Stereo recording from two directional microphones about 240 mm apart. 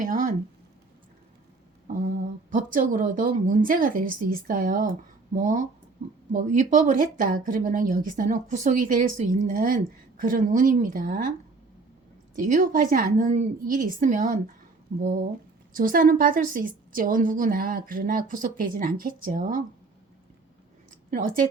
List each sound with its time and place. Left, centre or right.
0.0 s a woman's voice: right
2.0 s a woman's voice: right
6.3 s a woman's voice: right
12.5 s a woman's voice: right
21.1 s a woman's voice: right